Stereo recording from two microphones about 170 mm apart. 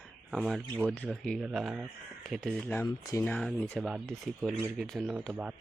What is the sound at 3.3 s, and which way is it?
Speech, 5° left (ahead or behind).